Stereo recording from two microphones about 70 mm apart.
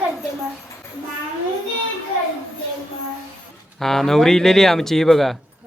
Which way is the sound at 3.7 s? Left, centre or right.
Centre.